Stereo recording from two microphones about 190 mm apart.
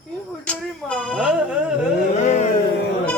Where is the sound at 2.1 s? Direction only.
35° left (ahead or behind).